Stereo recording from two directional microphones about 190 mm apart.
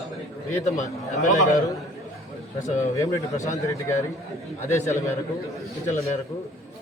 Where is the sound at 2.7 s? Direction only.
15° left (ahead or behind).